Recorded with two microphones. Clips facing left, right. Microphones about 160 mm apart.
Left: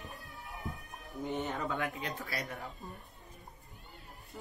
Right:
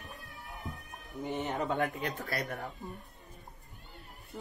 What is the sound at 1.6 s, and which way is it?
Speech, 45° right (ahead or behind).